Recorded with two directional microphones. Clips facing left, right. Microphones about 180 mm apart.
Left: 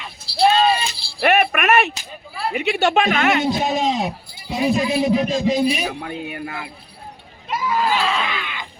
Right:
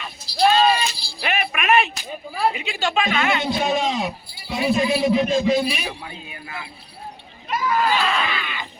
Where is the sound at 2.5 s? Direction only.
65° left (ahead or behind).